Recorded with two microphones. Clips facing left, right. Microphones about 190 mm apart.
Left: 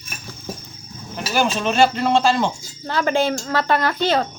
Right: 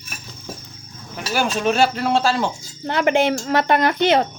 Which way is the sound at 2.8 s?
20° right (ahead or behind).